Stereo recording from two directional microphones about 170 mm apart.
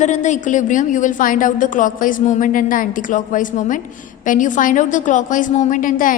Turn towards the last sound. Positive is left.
turn(degrees=50)  # may be behind; listen again after turning